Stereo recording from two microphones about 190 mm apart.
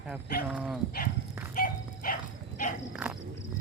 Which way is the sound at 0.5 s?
5° right (ahead or behind).